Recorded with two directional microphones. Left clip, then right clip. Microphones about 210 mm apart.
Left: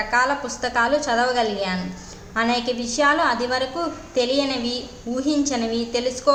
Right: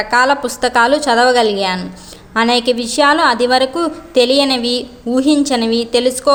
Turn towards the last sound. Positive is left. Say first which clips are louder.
# right 7 dB
turn(degrees=-40)  # may be behind; listen again after turning